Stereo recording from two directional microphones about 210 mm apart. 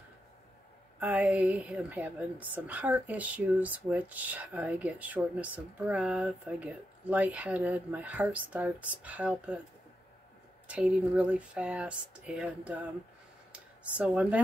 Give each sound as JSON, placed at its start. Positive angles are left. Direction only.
{"t": 0.9, "sound": "a woman's voice", "side_deg": -5}
{"t": 10.7, "sound": "speech", "side_deg": -5}
{"t": 13.5, "sound": "a sound", "side_deg": -5}